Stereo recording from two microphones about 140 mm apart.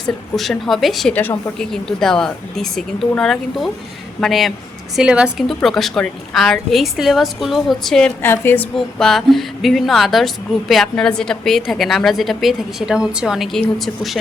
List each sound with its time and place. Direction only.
0.3 s speech: centre (ahead or behind)
1.1 s a woman's voice: 15° left (ahead or behind)
8.2 s a woman's voice: 15° left (ahead or behind)
8.7 s speech: 5° left (ahead or behind)